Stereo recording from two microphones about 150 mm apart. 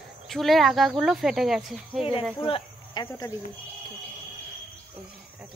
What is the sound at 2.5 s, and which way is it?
Cricket, 35° left (ahead or behind).